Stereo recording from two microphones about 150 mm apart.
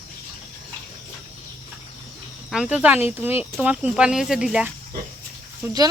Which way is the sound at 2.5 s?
5° right (ahead or behind).